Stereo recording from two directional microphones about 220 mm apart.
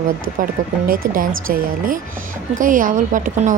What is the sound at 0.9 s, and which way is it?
A woman's voice, 40° right (ahead or behind).